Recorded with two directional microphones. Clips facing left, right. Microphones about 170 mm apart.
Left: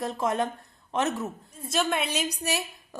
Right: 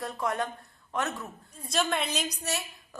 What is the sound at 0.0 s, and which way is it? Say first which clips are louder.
A woman's voice: left 4 dB; 20° left (ahead or behind).